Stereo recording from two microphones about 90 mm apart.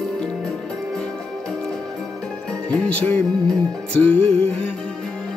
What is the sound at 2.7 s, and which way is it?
Music, 15° left (ahead or behind).